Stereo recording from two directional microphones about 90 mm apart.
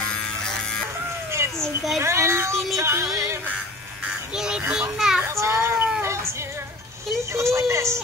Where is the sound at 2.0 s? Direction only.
30° right (ahead or behind).